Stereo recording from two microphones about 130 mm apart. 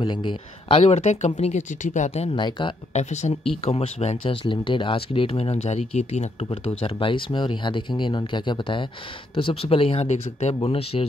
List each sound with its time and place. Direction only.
0.0 s speech: 35° left (ahead or behind); by 2.0 s 65° left (ahead or behind)
2.0 s speech: 50° left (ahead or behind)
2.9 s speech: 60° left (ahead or behind)
3.4 s speech: 45° left (ahead or behind)
6.8 s speech: 40° left (ahead or behind)